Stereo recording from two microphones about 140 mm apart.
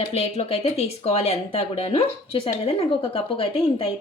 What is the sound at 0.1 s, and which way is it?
Speech, 45° left (ahead or behind).